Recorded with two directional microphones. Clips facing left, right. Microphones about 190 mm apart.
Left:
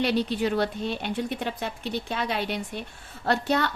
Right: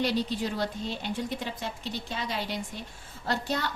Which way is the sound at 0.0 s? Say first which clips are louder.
Left 4 dB; 65° left (ahead or behind).